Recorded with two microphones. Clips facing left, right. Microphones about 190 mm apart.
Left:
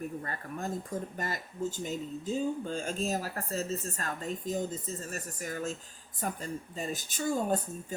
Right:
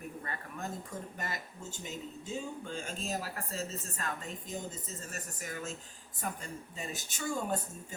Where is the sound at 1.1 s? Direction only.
40° left (ahead or behind).